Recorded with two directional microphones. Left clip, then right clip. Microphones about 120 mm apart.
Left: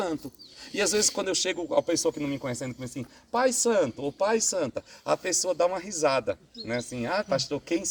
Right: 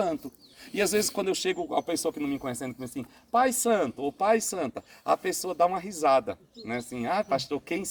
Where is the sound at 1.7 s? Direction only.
35° right (ahead or behind).